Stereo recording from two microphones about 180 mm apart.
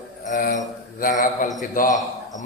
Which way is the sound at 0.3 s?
45° left (ahead or behind).